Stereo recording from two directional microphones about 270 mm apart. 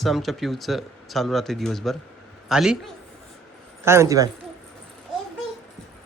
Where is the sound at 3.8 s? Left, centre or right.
Centre.